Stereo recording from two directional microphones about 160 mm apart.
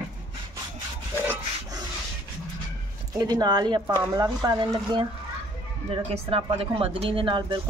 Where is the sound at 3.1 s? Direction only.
25° right (ahead or behind).